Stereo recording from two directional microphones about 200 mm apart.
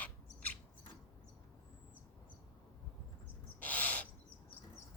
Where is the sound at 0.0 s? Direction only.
10° left (ahead or behind).